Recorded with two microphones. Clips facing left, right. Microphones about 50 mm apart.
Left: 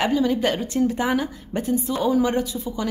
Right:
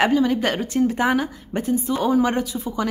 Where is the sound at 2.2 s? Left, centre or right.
Right.